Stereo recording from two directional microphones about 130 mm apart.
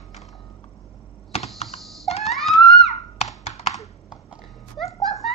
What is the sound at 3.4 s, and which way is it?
Computer keyboard, 60° left (ahead or behind).